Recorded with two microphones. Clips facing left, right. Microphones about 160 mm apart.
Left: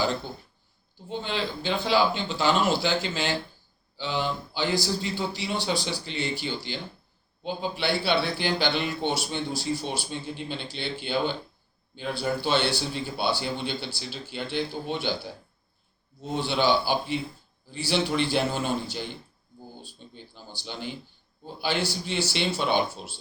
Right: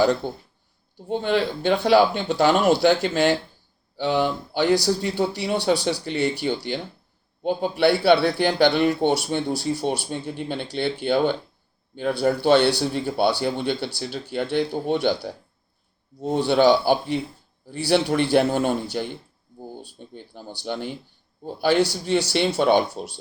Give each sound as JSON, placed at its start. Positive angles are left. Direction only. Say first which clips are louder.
{"t": 0.2, "sound": "speech", "louder": "right 8 dB", "side_deg": -60}